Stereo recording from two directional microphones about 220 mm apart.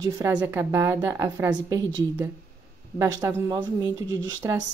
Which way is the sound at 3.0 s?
15° right (ahead or behind).